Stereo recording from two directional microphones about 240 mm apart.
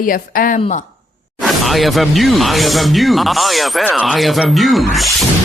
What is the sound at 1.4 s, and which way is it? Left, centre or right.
Speech, centre.